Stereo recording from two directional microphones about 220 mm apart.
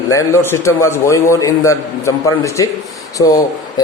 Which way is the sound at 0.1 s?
15° left (ahead or behind).